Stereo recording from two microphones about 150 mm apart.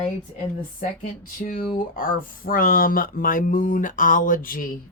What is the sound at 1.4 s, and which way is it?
Speech, 70° left (ahead or behind).